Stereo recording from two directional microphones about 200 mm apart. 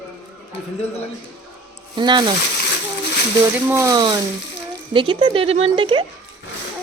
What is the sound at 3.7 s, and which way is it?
Speech, 20° right (ahead or behind).